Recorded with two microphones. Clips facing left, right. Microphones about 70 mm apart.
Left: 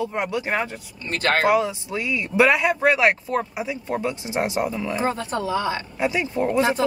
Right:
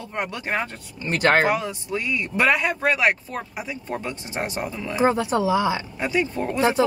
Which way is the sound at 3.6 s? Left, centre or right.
Centre.